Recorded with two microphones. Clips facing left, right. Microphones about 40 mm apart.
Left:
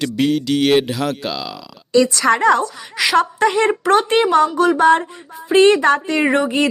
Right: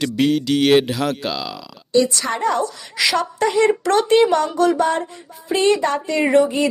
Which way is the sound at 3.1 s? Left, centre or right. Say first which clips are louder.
Left 4 dB; left.